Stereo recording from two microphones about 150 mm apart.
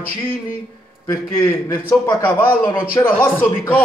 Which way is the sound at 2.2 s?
15° left (ahead or behind).